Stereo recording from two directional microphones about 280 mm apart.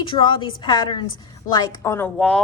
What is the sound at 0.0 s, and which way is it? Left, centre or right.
A woman's voice, centre.